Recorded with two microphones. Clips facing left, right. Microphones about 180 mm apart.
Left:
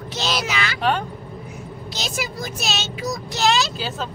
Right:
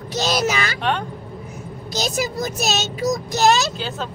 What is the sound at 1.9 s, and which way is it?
Speech, 45° right (ahead or behind).